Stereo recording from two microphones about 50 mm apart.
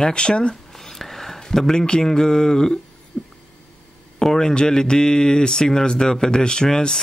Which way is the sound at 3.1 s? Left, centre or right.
Centre.